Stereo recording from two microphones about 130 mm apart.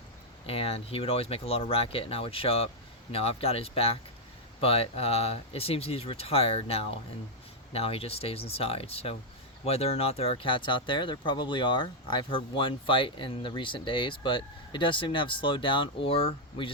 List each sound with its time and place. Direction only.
0.4 s speech: 50° left (ahead or behind)